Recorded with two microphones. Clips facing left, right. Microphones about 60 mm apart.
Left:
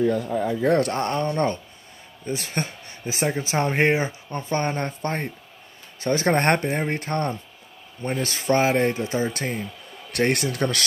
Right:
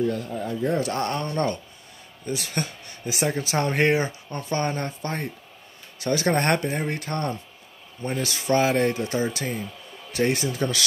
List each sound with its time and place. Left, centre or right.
0.6 s speech: left
0.9 s speech: left
3.3 s speech: centre
9.3 s speech: left
10.1 s speech: left